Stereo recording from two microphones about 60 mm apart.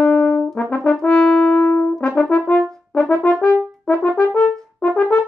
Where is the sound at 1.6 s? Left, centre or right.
Left.